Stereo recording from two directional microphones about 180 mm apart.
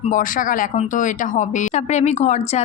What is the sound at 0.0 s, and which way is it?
A woman's voice, 45° left (ahead or behind).